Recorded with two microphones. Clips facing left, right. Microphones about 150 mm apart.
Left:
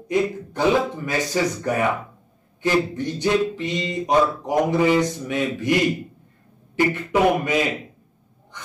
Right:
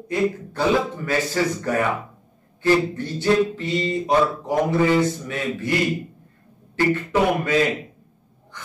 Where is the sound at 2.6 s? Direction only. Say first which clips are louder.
Right 2 dB; 15° left (ahead or behind).